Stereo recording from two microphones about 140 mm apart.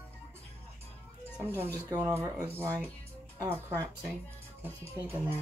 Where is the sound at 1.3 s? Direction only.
15° right (ahead or behind).